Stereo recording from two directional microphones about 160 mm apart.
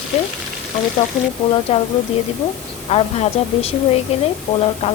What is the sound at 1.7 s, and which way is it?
Speech, 40° left (ahead or behind).